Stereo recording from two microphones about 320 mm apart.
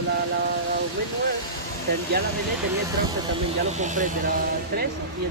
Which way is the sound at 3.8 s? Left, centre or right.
Right.